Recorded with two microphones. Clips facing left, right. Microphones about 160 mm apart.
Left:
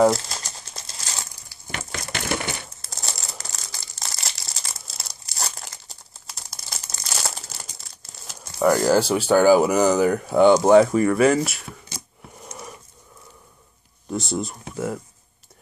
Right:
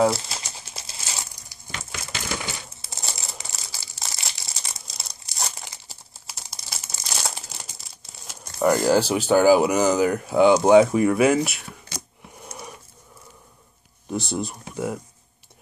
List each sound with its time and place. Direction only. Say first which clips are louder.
0.0 s crumpling: left 3 dB; 5° right (ahead or behind)
1.7 s crushing: left 4 dB; 55° left (ahead or behind)
2.8 s crumpling: left 1 dB; centre (ahead or behind)
8.7 s speech: left 1 dB; centre (ahead or behind)
14.1 s speech: left 1 dB; centre (ahead or behind)